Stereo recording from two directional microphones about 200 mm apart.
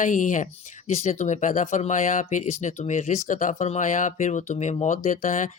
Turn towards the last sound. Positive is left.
turn(degrees=40)  # may be behind; listen again after turning